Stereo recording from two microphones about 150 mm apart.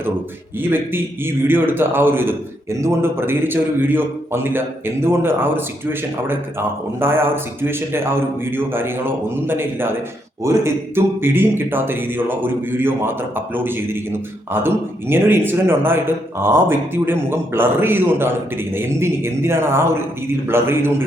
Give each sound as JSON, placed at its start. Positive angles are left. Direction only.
{"t": 1.5, "sound": "a man's voice", "side_deg": -15}